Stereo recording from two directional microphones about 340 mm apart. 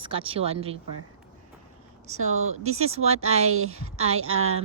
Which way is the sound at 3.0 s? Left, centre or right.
Centre.